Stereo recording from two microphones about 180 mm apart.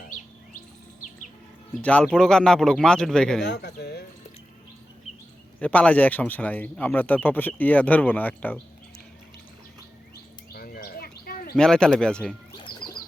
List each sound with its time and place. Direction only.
1.8 s speech: 5° left (ahead or behind)
3.4 s speech: 70° left (ahead or behind)
5.5 s a man's voice: 5° left (ahead or behind)
10.5 s bird: 55° left (ahead or behind)
11.5 s speech: 5° left (ahead or behind)
12.5 s a sound: 25° left (ahead or behind)